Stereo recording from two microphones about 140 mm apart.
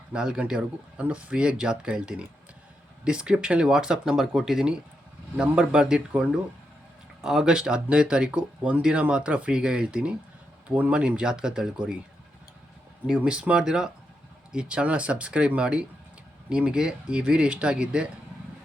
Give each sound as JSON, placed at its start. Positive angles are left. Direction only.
{"t": 0.1, "sound": "speech", "side_deg": -5}
{"t": 13.1, "sound": "speech", "side_deg": -5}